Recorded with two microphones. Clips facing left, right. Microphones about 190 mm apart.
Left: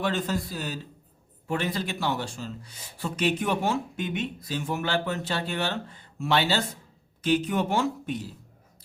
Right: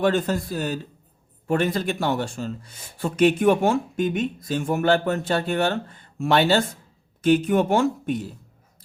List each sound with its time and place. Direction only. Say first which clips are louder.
0.0 s speech: right 6 dB; 50° right (ahead or behind)